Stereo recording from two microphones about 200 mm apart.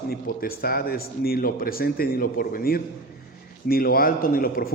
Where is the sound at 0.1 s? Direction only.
50° left (ahead or behind).